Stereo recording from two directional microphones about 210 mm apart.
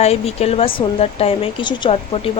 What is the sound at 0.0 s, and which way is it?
Speech, 30° left (ahead or behind).